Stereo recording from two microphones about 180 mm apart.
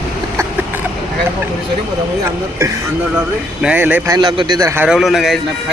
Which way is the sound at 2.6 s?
15° right (ahead or behind).